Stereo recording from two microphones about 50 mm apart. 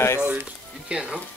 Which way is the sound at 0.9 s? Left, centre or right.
Centre.